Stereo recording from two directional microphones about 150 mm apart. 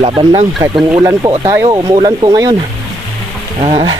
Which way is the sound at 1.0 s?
25° right (ahead or behind).